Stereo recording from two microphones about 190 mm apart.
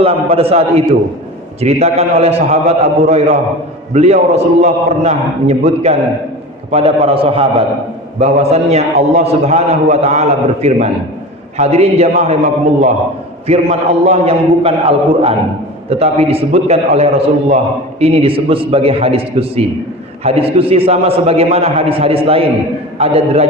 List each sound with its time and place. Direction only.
0.0 s a man's voice: 30° right (ahead or behind)
1.6 s a man's voice: 35° right (ahead or behind)
13.5 s a man's voice: 35° right (ahead or behind)